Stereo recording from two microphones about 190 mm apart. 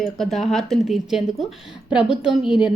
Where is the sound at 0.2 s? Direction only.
Centre (ahead or behind).